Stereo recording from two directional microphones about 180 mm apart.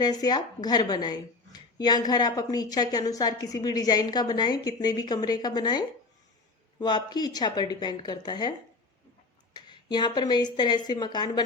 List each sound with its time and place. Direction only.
0.0 s a woman's voice: 20° left (ahead or behind)
9.6 s a woman's voice: 25° left (ahead or behind)